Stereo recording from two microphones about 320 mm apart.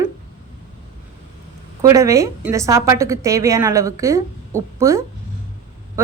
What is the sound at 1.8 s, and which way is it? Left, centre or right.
A woman's voice, centre.